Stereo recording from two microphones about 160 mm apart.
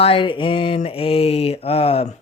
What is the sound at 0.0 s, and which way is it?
Speech, 35° left (ahead or behind).